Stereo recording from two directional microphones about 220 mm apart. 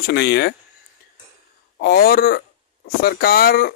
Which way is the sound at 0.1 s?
50° left (ahead or behind).